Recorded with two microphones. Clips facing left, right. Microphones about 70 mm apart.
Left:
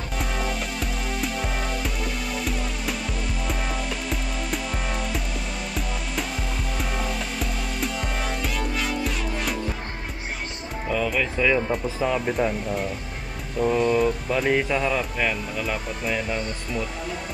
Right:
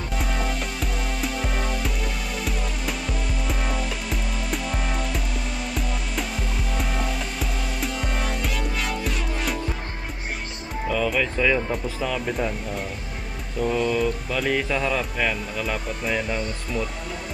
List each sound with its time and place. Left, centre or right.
0.2 s music: centre
3.4 s music: centre
6.8 s music: centre
10.9 s music: centre
12.0 s speech: centre
12.4 s speech: centre
13.6 s speech: centre